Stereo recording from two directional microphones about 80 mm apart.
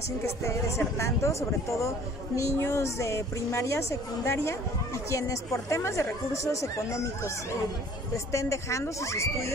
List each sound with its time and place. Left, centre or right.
0.4 s speech: left